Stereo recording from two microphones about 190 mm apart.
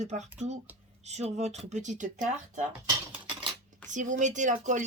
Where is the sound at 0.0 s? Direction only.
40° right (ahead or behind).